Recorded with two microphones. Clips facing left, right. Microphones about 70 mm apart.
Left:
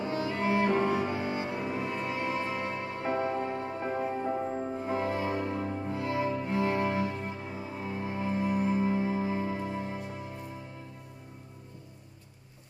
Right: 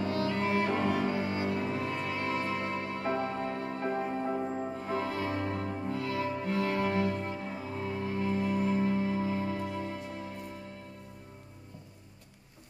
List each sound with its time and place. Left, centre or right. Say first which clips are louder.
0.0 s music: even; centre
4.5 s music: left 1 dB; centre
4.7 s music: left 2 dB; centre